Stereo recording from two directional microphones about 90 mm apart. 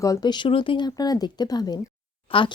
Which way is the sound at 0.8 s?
45° left (ahead or behind).